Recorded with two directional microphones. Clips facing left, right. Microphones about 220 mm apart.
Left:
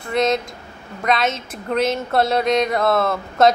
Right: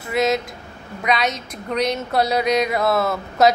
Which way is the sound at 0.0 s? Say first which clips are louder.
Left 1 dB; 5° right (ahead or behind).